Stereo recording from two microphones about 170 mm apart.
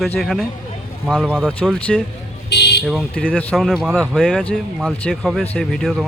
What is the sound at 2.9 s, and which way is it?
Speech, centre (ahead or behind).